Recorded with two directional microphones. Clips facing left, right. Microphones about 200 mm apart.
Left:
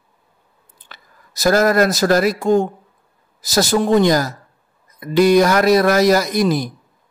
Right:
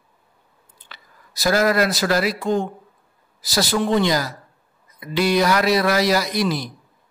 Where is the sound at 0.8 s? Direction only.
45° left (ahead or behind).